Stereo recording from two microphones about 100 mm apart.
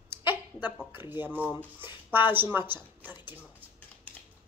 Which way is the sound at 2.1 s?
20° right (ahead or behind).